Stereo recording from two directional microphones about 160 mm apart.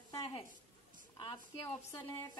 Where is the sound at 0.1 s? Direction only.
30° left (ahead or behind).